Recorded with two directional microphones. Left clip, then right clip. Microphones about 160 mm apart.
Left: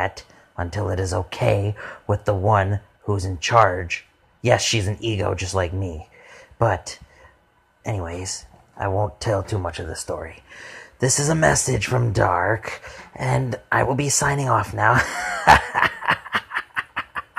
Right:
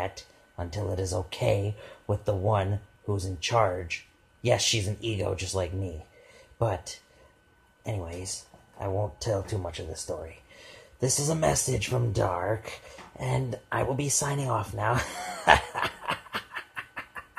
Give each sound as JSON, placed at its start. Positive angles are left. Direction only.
{"t": 0.0, "sound": "speech", "side_deg": 20}